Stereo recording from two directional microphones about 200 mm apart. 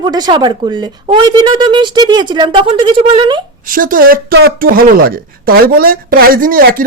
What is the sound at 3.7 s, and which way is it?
A woman's voice, 45° right (ahead or behind).